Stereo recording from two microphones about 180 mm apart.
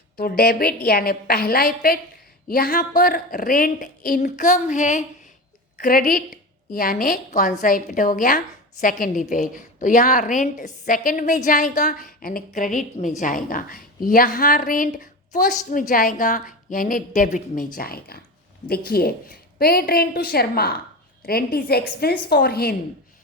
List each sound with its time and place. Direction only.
0.2 s a woman's voice: 60° left (ahead or behind)